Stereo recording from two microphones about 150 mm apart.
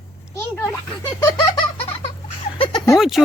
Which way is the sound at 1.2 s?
30° left (ahead or behind).